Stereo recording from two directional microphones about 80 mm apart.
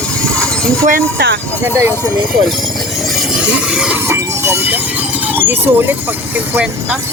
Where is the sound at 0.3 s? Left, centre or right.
Centre.